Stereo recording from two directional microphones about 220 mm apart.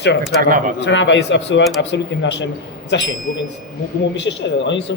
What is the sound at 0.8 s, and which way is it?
Speech, 55° left (ahead or behind).